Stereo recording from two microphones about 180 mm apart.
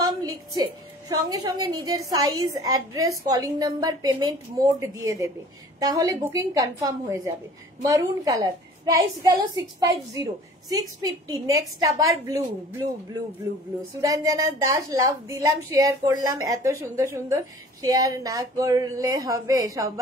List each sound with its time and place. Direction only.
0.0 s a woman's voice: 20° right (ahead or behind)
14.0 s a woman's voice: 20° right (ahead or behind)